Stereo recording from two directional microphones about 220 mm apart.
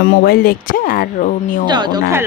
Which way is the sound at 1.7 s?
20° right (ahead or behind).